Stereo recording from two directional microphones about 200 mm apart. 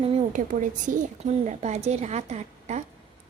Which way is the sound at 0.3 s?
40° right (ahead or behind).